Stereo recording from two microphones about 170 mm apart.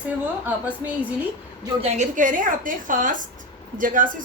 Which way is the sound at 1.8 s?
40° right (ahead or behind).